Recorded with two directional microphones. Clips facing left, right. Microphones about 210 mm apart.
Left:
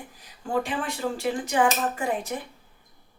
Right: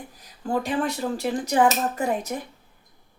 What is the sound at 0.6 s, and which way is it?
Speech, 40° right (ahead or behind).